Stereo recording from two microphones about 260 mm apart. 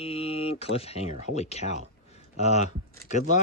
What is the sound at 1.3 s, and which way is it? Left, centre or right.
Speech, left.